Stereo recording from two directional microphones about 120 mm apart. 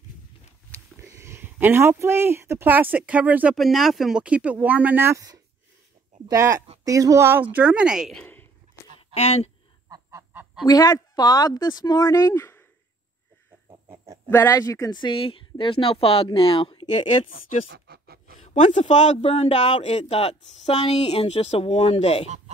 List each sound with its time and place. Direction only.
1.0 s speech: 25° right (ahead or behind)
3.5 s speech: centre (ahead or behind)
8.2 s a sound: 15° left (ahead or behind)
9.1 s a man's voice: 60° left (ahead or behind)
9.8 s goose: 30° right (ahead or behind)
10.7 s speech: 35° left (ahead or behind)
13.7 s chicken: 25° right (ahead or behind)
14.3 s speech: 20° left (ahead or behind); by 17.3 s 50° left (ahead or behind)
18.4 s a man's voice: 75° left (ahead or behind); by 22.3 s 55° left (ahead or behind)